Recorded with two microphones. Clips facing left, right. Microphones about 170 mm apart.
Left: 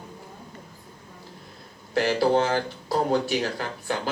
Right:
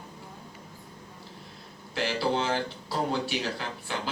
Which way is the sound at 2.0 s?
45° left (ahead or behind).